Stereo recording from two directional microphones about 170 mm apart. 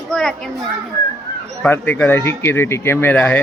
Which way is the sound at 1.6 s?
10° left (ahead or behind).